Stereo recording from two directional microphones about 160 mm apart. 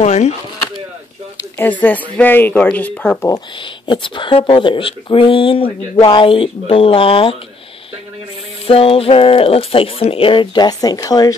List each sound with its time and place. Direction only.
0.0 s speech: 45° left (ahead or behind)
1.6 s a woman's voice: 10° left (ahead or behind)
3.8 s speech: 30° left (ahead or behind)
8.6 s speech: 35° left (ahead or behind)